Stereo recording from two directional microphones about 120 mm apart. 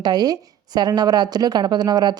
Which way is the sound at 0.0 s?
35° right (ahead or behind).